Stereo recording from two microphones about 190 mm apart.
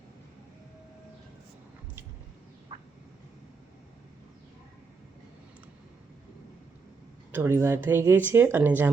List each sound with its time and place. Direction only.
2.7 s frog: 25° right (ahead or behind)
7.3 s speech: 15° right (ahead or behind)